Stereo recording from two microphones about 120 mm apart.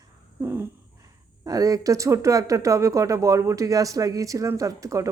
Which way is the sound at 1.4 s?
30° right (ahead or behind).